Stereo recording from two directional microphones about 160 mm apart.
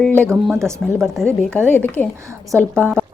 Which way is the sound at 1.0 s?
Centre (ahead or behind).